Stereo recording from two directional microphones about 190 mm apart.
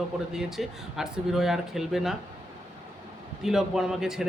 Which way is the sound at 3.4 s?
Centre (ahead or behind).